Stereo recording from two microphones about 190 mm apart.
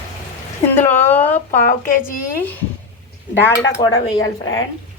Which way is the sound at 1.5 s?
45° left (ahead or behind).